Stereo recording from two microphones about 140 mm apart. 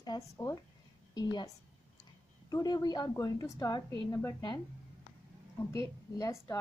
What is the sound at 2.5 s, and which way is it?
A woman's voice, 30° left (ahead or behind).